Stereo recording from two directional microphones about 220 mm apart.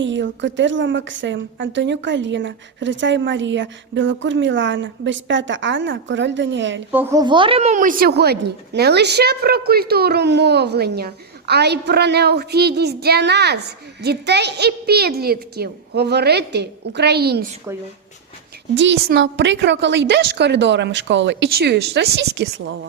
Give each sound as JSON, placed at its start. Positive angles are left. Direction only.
{"t": 0.0, "sound": "a woman's voice", "side_deg": -55}
{"t": 6.9, "sound": "speech", "side_deg": -10}
{"t": 17.7, "sound": "speech", "side_deg": -15}
{"t": 18.8, "sound": "speech", "side_deg": -50}